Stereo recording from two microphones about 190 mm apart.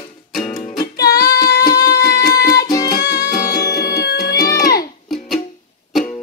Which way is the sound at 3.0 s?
60° left (ahead or behind).